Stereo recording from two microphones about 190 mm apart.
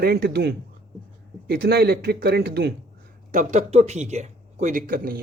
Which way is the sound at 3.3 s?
40° right (ahead or behind).